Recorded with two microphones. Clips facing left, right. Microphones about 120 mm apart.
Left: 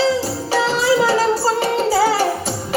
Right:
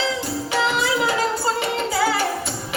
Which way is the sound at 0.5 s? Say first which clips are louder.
Left 5 dB; 35° left (ahead or behind).